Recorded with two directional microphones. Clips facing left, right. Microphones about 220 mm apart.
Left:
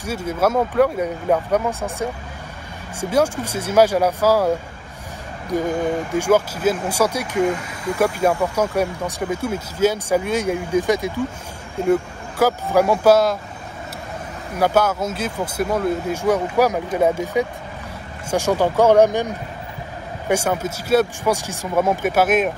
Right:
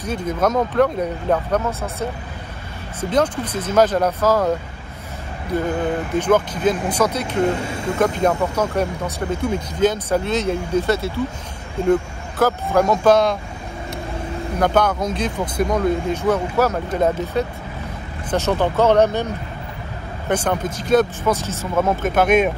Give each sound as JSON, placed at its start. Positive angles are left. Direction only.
{"t": 0.0, "sound": "speech", "side_deg": 10}
{"t": 3.1, "sound": "speech", "side_deg": 10}
{"t": 7.6, "sound": "speech", "side_deg": -25}
{"t": 8.0, "sound": "speech", "side_deg": 10}
{"t": 14.6, "sound": "speech", "side_deg": 5}